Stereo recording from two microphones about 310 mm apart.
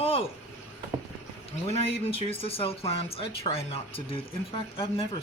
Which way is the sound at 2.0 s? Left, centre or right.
Centre.